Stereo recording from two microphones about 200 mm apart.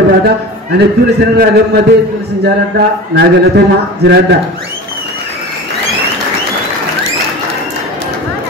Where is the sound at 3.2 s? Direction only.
55° right (ahead or behind).